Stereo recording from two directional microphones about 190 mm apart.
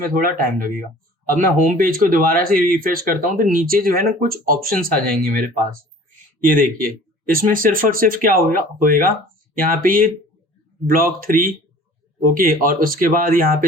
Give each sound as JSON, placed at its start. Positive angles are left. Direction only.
{"t": 0.0, "sound": "speech", "side_deg": -50}